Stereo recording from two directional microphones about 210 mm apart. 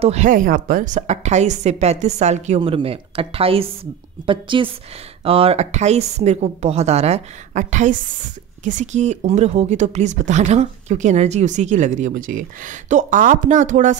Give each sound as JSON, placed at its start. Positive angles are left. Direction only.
{"t": 0.0, "sound": "a woman's voice", "side_deg": -35}